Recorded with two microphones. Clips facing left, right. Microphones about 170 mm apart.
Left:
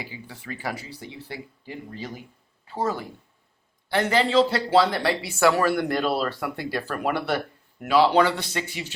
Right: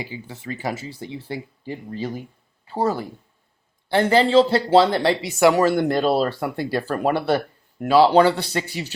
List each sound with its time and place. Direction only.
0.0 s speech: 25° right (ahead or behind)